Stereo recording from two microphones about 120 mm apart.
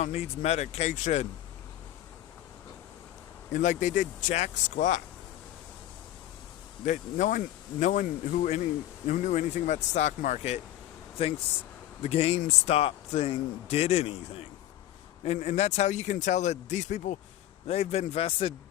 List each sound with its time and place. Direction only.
0.0 s speech: 65° left (ahead or behind)
3.5 s speech: 90° left
6.8 s speech: 90° left; by 10.6 s 75° left (ahead or behind)
12.0 s a man's voice: 55° left (ahead or behind)
15.2 s speech: 70° left (ahead or behind)
17.7 s a man's voice: 60° left (ahead or behind)